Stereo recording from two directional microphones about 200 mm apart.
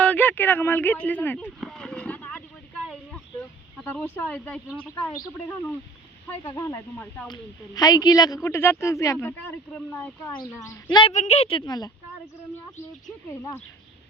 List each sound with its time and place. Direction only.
0.0 s speech: 5° left (ahead or behind)
3.8 s speech: 10° left (ahead or behind)
6.4 s speech: 20° left (ahead or behind)
11.1 s speech: 35° left (ahead or behind)